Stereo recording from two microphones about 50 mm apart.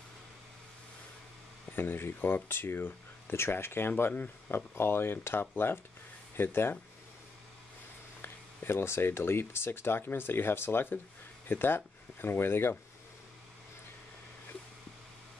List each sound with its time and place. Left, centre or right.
1.7 s speech: left
8.2 s speech: left